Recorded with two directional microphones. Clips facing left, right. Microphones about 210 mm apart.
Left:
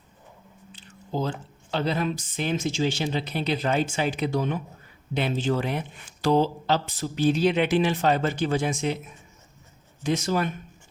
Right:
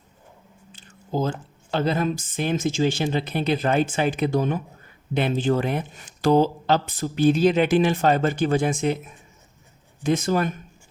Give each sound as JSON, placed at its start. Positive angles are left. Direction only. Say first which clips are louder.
{"t": 0.7, "sound": "squish", "louder": "right 3 dB", "side_deg": -45}
{"t": 1.7, "sound": "speech", "louder": "right 3 dB", "side_deg": -50}
{"t": 10.0, "sound": "speech", "louder": "right 3 dB", "side_deg": -50}